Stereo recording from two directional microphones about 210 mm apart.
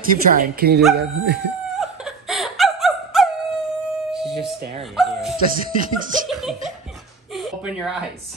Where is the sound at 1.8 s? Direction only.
Centre (ahead or behind).